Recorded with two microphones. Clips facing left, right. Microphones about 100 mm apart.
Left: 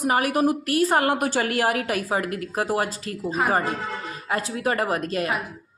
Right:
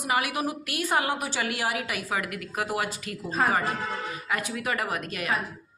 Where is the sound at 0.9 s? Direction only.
50° left (ahead or behind).